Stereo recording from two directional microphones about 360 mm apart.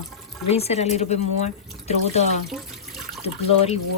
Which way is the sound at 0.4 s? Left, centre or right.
Centre.